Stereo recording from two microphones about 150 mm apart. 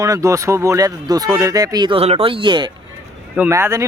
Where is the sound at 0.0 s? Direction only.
20° right (ahead or behind).